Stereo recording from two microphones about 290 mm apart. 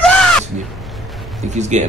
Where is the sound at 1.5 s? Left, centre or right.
Right.